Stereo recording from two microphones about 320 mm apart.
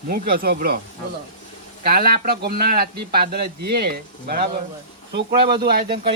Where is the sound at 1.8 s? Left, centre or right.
Right.